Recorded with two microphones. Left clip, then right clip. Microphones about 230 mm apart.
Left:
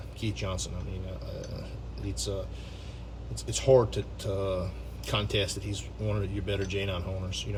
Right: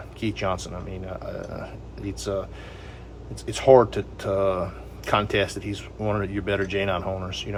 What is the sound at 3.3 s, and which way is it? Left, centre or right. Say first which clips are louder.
A man's voice: right 7 dB; centre.